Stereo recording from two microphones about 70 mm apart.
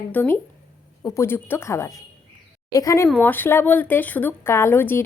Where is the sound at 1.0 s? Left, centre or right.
Left.